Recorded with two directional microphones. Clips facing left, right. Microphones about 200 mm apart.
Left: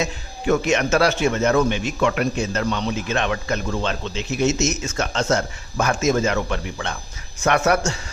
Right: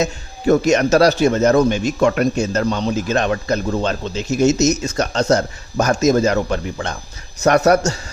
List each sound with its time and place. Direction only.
0.0 s a man's voice: 40° right (ahead or behind)